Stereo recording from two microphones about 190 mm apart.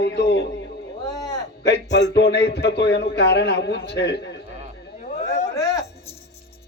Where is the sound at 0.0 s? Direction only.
65° left (ahead or behind).